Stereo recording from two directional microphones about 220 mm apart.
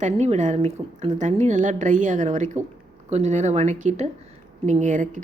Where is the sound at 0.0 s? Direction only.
30° right (ahead or behind).